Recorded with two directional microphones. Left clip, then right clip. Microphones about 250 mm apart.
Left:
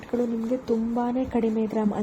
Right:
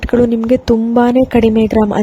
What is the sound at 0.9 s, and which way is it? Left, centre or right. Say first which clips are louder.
Speech: right 15 dB; right.